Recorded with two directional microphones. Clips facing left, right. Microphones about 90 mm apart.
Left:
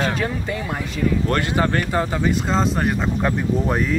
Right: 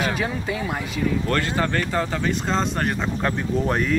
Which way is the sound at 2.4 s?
Centre (ahead or behind).